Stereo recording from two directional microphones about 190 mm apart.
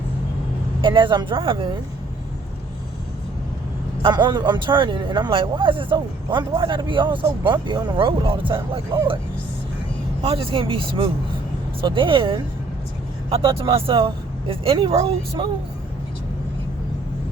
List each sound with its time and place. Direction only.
0.8 s speech: 25° right (ahead or behind)
4.0 s speech: 25° right (ahead or behind)
10.2 s speech: 30° right (ahead or behind)